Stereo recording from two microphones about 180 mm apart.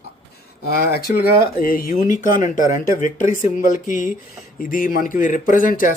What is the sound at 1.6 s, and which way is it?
Speech, 50° left (ahead or behind).